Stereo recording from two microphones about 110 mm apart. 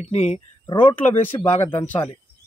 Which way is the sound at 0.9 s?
15° left (ahead or behind).